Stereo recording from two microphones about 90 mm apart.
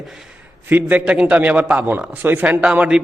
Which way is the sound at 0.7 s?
20° right (ahead or behind).